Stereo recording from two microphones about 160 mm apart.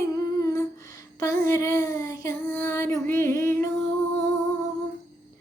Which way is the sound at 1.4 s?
20° left (ahead or behind).